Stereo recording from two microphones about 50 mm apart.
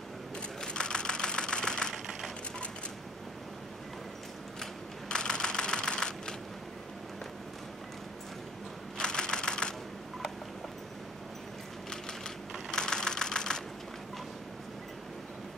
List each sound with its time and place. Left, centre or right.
0.6 s typewriter: centre
4.6 s camera: centre
8.9 s typewriter: centre
12.7 s engine: centre